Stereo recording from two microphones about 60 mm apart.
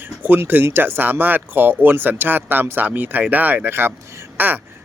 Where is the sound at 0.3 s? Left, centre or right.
Right.